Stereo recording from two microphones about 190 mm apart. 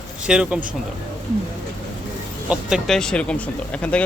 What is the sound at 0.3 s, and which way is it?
Speech, 5° right (ahead or behind).